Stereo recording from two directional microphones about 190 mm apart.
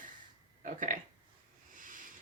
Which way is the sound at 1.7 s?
45° right (ahead or behind).